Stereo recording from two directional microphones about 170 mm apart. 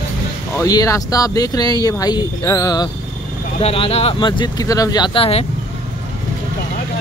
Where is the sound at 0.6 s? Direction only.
20° left (ahead or behind).